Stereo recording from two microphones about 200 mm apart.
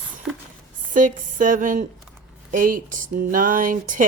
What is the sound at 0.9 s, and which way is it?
Speech, 40° right (ahead or behind).